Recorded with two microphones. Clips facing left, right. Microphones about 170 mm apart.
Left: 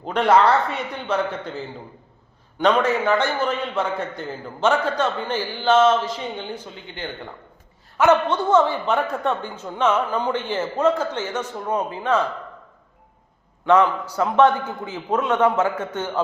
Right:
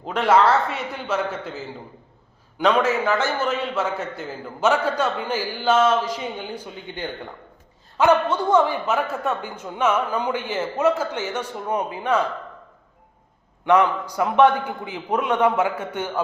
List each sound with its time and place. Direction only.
0.0 s a man's voice: centre (ahead or behind)
13.7 s a man's voice: 15° right (ahead or behind)